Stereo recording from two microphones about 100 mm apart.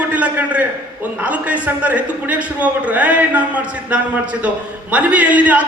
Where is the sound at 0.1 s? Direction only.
15° right (ahead or behind).